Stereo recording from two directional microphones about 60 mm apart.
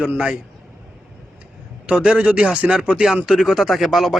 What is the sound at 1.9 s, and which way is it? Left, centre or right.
Speech, centre.